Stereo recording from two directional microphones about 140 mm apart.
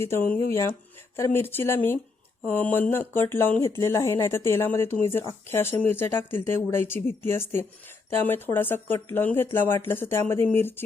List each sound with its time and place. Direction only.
0.0 s speech: 15° left (ahead or behind)